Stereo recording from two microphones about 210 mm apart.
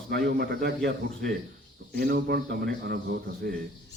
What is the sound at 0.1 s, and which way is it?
Speech, 50° right (ahead or behind).